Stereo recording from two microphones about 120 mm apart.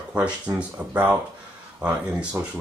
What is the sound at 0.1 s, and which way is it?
Speech, 10° right (ahead or behind).